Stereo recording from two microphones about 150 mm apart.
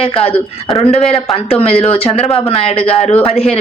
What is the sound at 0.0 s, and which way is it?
Speech, 40° left (ahead or behind).